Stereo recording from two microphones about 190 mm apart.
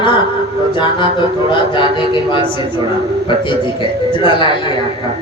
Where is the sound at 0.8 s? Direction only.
25° left (ahead or behind).